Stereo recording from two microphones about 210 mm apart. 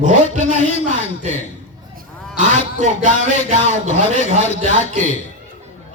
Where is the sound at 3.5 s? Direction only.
35° right (ahead or behind).